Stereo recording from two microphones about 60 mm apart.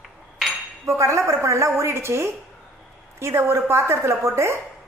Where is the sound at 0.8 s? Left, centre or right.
Right.